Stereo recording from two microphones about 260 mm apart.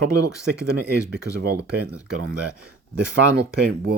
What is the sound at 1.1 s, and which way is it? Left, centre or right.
Speech, right.